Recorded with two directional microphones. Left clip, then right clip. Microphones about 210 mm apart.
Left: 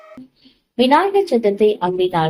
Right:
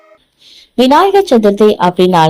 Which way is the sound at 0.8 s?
40° right (ahead or behind).